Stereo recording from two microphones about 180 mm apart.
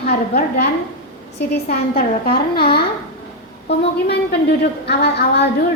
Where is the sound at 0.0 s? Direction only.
55° left (ahead or behind).